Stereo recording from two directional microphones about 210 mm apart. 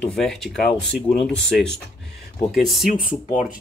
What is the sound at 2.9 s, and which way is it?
Speech, 40° left (ahead or behind).